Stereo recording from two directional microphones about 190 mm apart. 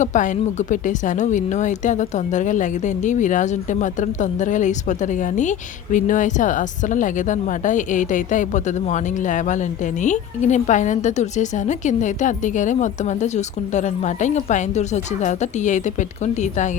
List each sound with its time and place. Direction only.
0.0 s speech: 40° left (ahead or behind)